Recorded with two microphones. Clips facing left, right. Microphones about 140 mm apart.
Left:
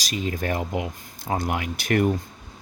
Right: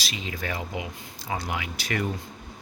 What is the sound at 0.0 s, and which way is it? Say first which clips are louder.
Speech: left 6 dB; 45° left (ahead or behind).